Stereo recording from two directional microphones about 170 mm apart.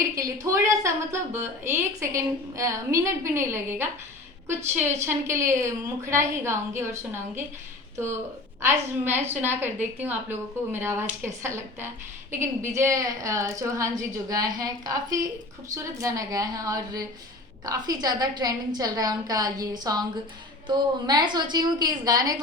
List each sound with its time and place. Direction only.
0.2 s a woman's voice: 20° right (ahead or behind)